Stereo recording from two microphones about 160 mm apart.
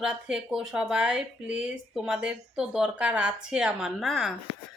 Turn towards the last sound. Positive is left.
turn(degrees=0)  # may be behind; listen again after turning